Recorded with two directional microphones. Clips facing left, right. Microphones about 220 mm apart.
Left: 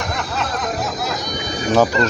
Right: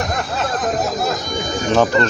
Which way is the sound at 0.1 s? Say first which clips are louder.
Right 2 dB; 45° right (ahead or behind).